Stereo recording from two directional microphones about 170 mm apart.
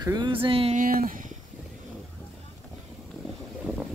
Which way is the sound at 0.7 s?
55° right (ahead or behind).